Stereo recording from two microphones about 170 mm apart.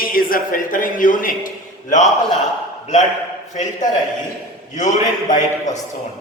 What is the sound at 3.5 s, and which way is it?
A man's voice, 45° left (ahead or behind).